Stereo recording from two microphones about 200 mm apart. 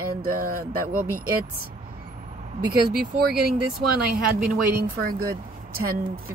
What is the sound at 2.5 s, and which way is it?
Speech, 50° right (ahead or behind).